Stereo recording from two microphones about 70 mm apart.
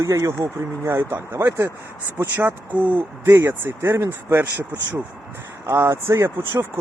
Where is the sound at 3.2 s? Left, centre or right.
Right.